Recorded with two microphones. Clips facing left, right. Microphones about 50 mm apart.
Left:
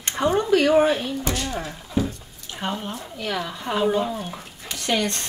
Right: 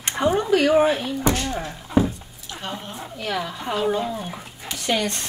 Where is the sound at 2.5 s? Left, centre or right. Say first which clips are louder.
Left 3 dB; left.